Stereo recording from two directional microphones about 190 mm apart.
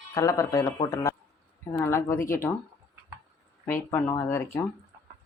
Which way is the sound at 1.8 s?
15° left (ahead or behind).